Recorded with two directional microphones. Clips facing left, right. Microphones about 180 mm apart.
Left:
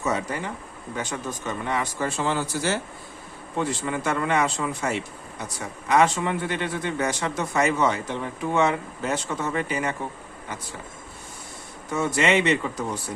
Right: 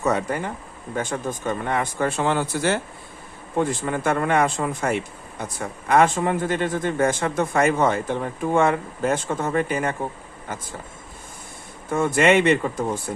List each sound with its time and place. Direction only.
0.0 s speech: 60° right (ahead or behind)
11.9 s speech: 50° right (ahead or behind)